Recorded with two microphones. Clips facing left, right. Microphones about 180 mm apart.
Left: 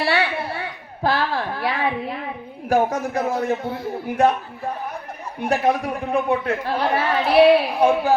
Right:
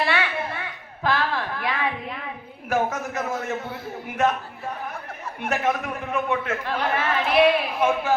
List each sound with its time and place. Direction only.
0.0 s a sound: 35° left (ahead or behind)
2.6 s a man's voice: 35° left (ahead or behind)
5.4 s a man's voice: 35° left (ahead or behind)